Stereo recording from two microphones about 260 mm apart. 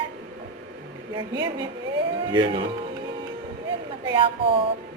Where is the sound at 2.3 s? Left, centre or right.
Centre.